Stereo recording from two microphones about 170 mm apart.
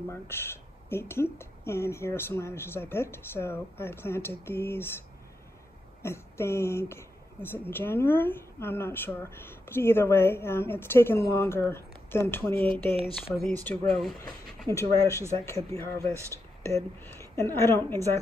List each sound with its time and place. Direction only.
0.1 s speech: 15° left (ahead or behind)
6.0 s speech: 15° left (ahead or behind)
14.7 s speech: 15° left (ahead or behind)